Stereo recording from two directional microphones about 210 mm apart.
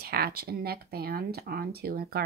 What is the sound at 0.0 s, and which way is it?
Speech, 50° right (ahead or behind).